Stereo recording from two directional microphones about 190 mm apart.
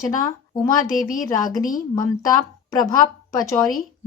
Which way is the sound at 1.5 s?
45° left (ahead or behind).